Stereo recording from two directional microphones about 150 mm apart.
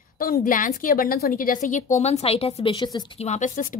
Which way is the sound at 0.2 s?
70° left (ahead or behind).